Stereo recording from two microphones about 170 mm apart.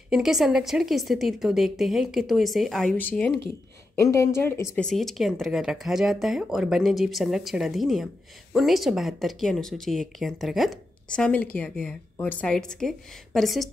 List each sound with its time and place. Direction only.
0.1 s speech: 5° right (ahead or behind); by 4.8 s 15° left (ahead or behind)
4.8 s speech: centre (ahead or behind)